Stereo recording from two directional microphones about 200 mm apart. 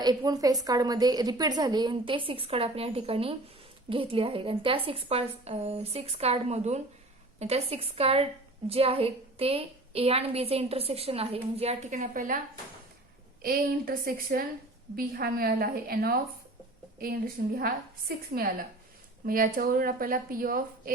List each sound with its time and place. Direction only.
0.0 s a woman's voice: 20° right (ahead or behind); by 12.4 s 40° right (ahead or behind)
13.4 s speech: 45° right (ahead or behind)
17.4 s speech: 50° right (ahead or behind)